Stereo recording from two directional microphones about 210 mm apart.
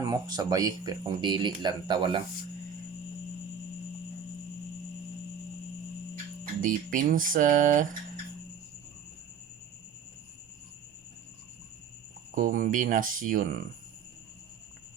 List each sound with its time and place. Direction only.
0.0 s speech: 20° right (ahead or behind)
6.6 s speech: 40° right (ahead or behind)
12.3 s speech: 40° right (ahead or behind)